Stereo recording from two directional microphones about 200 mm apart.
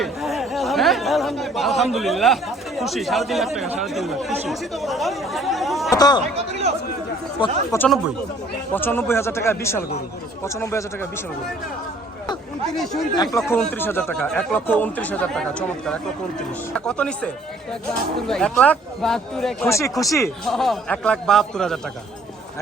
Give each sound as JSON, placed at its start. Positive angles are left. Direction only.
{"t": 0.0, "sound": "speech", "side_deg": 0}
{"t": 5.9, "sound": "speech", "side_deg": 20}
{"t": 6.3, "sound": "speech", "side_deg": -30}
{"t": 7.3, "sound": "speech", "side_deg": 25}
{"t": 8.7, "sound": "speech", "side_deg": 10}
{"t": 12.7, "sound": "speech", "side_deg": 0}
{"t": 19.6, "sound": "speech", "side_deg": 15}
{"t": 20.4, "sound": "speech", "side_deg": 0}